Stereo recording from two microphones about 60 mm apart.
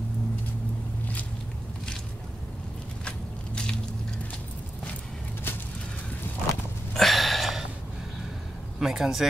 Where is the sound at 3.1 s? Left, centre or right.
Centre.